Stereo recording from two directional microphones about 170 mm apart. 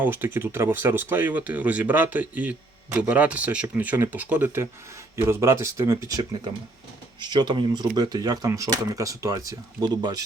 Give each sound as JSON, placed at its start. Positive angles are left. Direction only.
{"t": 0.0, "sound": "speech", "side_deg": -10}